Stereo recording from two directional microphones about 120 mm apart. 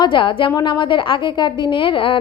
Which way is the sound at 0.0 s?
45° left (ahead or behind).